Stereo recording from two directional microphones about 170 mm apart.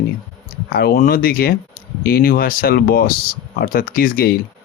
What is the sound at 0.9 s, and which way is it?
Speech, 60° left (ahead or behind).